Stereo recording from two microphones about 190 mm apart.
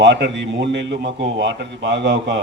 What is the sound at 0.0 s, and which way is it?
A man's voice, 70° right (ahead or behind).